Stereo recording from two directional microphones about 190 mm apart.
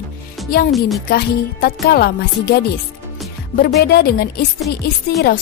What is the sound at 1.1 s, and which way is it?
A woman's voice, 50° left (ahead or behind).